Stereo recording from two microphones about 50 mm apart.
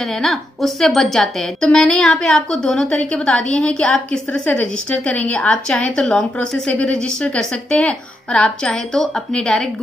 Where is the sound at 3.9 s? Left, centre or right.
Left.